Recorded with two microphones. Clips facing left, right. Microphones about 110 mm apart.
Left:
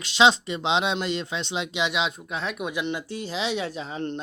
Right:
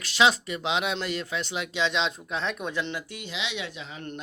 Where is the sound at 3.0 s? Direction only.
35° left (ahead or behind).